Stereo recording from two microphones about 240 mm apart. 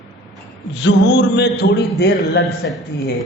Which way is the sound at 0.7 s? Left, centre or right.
Left.